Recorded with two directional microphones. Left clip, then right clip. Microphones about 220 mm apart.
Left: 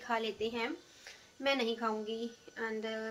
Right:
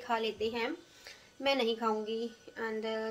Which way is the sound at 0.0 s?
5° right (ahead or behind).